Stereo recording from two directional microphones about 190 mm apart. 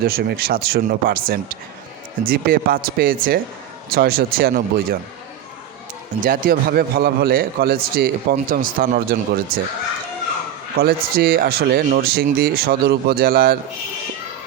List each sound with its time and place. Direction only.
0.0 s a man's voice: 55° right (ahead or behind)
6.2 s a man's voice: 50° right (ahead or behind)
10.8 s a man's voice: 55° right (ahead or behind)